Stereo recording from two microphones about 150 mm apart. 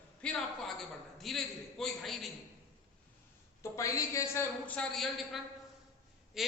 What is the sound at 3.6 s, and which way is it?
A woman's voice, 20° left (ahead or behind).